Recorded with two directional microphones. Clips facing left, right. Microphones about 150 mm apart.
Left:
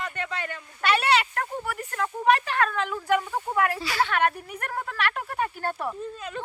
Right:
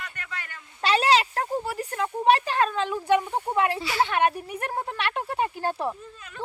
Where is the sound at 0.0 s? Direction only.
25° left (ahead or behind).